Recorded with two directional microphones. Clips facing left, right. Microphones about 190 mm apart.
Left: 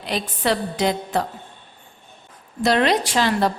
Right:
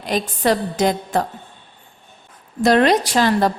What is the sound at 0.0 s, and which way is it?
A woman's voice, 45° right (ahead or behind).